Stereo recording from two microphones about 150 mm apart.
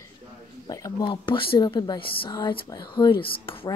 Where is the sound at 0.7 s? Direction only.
25° left (ahead or behind).